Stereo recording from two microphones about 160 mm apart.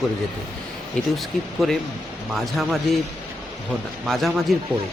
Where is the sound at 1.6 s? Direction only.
Centre (ahead or behind).